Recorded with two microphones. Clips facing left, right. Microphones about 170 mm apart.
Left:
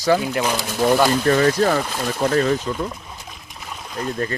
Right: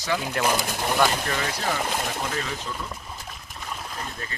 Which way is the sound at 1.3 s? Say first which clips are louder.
Left 11 dB; 50° left (ahead or behind).